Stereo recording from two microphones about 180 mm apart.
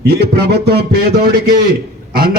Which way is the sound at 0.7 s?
60° right (ahead or behind).